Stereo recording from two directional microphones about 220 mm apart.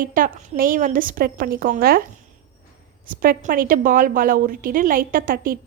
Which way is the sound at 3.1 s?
40° right (ahead or behind).